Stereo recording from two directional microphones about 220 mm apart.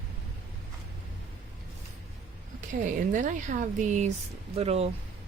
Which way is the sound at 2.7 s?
35° right (ahead or behind).